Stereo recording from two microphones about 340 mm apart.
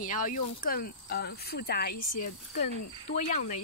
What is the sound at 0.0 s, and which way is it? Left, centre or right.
Speech, left.